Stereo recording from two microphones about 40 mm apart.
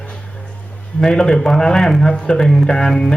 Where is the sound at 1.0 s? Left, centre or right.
Centre.